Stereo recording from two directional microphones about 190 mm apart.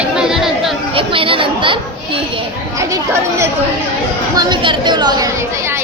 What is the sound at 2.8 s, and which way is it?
Chatter, 15° right (ahead or behind).